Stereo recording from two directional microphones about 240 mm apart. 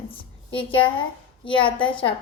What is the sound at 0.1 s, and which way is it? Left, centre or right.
A woman's voice, left.